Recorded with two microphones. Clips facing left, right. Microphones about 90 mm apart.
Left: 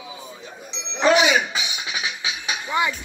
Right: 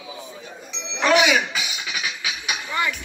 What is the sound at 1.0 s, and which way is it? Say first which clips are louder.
Music: left 1 dB; 30° left (ahead or behind).